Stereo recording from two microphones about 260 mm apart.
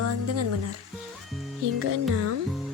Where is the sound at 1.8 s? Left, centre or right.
Right.